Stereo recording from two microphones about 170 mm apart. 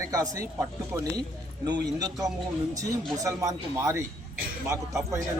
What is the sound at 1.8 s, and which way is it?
Speech, 20° right (ahead or behind).